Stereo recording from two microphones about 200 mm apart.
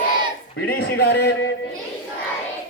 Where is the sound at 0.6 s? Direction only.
55° left (ahead or behind).